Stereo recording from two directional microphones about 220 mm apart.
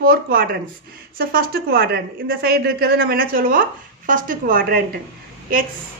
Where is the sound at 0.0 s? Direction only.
40° right (ahead or behind).